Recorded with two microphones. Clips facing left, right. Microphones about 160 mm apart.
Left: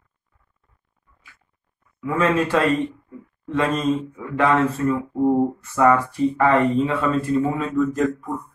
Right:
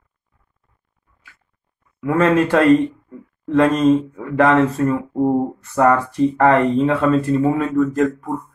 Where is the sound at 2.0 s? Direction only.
60° right (ahead or behind).